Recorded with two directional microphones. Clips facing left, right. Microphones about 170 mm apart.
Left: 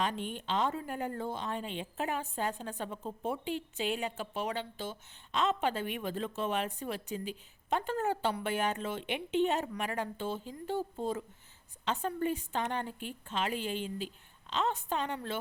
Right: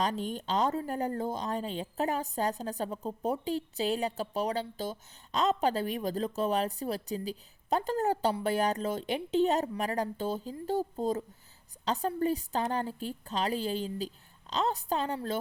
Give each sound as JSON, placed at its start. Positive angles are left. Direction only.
{"t": 0.0, "sound": "speech", "side_deg": -40}